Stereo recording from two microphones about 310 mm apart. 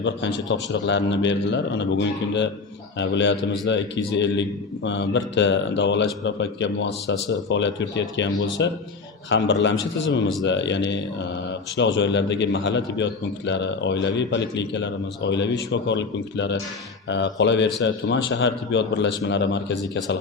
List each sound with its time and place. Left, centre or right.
0.0 s a man's voice: left